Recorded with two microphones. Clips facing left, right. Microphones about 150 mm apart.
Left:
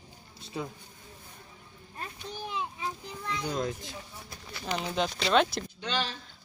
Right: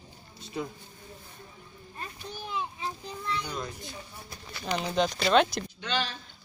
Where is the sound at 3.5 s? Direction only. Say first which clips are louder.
Left 5 dB; 90° left.